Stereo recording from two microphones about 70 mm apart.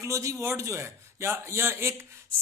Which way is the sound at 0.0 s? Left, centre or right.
Right.